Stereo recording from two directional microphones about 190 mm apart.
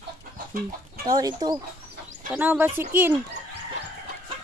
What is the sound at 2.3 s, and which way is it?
Speech, 10° right (ahead or behind).